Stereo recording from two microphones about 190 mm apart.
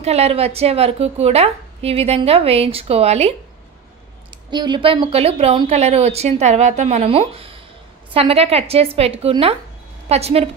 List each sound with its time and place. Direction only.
0.0 s a woman's voice: 35° right (ahead or behind)
4.5 s a woman's voice: 25° right (ahead or behind)